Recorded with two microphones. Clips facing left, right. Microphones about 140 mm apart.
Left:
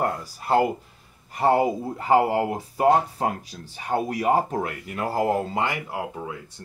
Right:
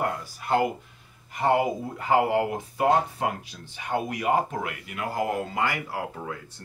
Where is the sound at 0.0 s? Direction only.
35° left (ahead or behind).